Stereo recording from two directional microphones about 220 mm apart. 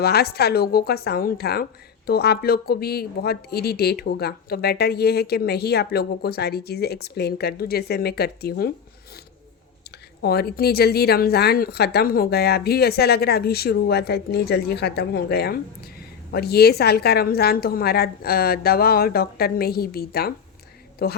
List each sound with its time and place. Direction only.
0.0 s speech: 45° left (ahead or behind)
10.2 s speech: 45° left (ahead or behind)